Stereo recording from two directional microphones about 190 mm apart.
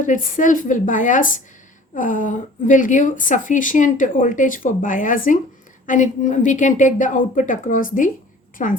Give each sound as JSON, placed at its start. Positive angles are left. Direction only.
{"t": 0.0, "sound": "a woman's voice", "side_deg": 45}